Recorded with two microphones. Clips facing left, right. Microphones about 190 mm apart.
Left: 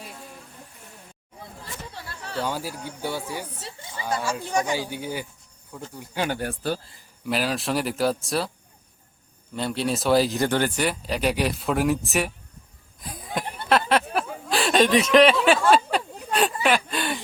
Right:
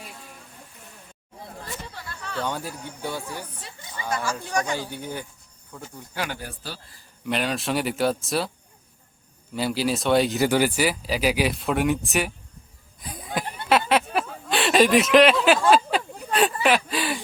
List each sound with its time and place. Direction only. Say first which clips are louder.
1.9 s chatter: even; 30° left (ahead or behind)
2.4 s speech: left 1 dB; 5° left (ahead or behind)
3.6 s a sound: left 2 dB; 25° left (ahead or behind)
4.1 s speech: left 1 dB; 25° left (ahead or behind)
4.7 s speech: left 2 dB; 5° left (ahead or behind)
6.3 s a man's voice: left 9 dB; 55° left (ahead or behind)
7.3 s speech: even; centre (ahead or behind)
9.6 s speech: right 1 dB; 5° right (ahead or behind)
13.0 s a sound: right 1 dB; centre (ahead or behind)
14.5 s speech: right 1 dB; centre (ahead or behind)
15.7 s a sound: even; centre (ahead or behind)
16.6 s speech: right 1 dB; centre (ahead or behind)